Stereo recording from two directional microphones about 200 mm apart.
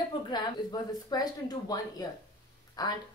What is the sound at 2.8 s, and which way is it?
Speech, 20° left (ahead or behind).